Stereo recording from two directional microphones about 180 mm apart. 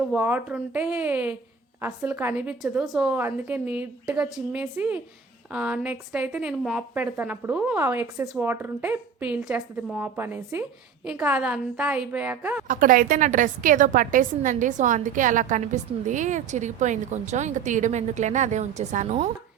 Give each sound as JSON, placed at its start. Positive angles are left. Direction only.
{"t": 0.1, "sound": "a woman's voice", "side_deg": -10}
{"t": 12.6, "sound": "a woman's voice", "side_deg": -50}